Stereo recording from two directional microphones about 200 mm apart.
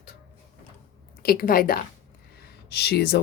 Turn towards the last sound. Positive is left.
turn(degrees=55)  # may be behind; listen again after turning